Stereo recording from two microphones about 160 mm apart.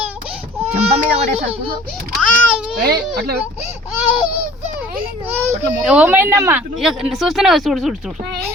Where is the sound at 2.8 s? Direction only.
75° right (ahead or behind).